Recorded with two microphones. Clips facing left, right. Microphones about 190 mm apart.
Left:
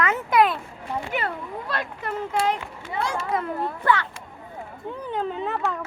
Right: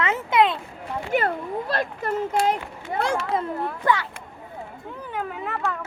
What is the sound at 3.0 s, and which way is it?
Speech, 60° right (ahead or behind).